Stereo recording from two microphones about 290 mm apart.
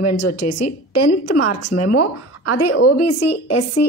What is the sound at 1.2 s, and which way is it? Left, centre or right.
A woman's voice, left.